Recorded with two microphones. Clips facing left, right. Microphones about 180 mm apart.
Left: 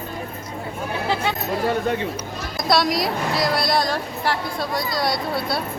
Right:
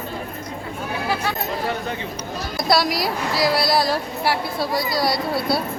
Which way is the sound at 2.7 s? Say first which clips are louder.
Even; centre (ahead or behind).